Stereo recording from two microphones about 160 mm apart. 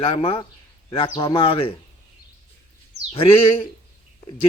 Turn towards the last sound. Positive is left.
turn(degrees=35)  # may be behind; listen again after turning